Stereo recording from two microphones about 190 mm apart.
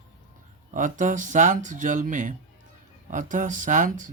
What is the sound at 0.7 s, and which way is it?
Speech, 40° right (ahead or behind).